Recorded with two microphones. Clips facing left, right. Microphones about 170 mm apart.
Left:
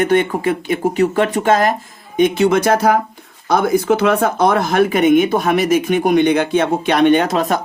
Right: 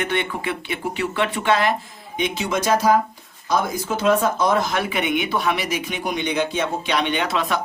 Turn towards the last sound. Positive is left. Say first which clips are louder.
# left 8 dB
turn(degrees=45)  # may be behind; listen again after turning